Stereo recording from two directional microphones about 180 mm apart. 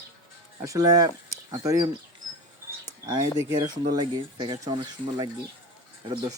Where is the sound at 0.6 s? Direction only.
20° right (ahead or behind).